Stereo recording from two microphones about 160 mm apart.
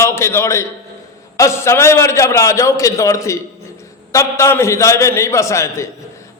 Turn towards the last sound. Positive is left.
turn(degrees=15)  # may be behind; listen again after turning